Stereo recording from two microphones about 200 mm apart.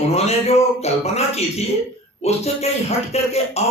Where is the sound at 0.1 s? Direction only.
30° left (ahead or behind).